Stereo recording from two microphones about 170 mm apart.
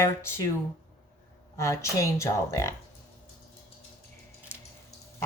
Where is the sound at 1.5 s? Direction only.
20° left (ahead or behind).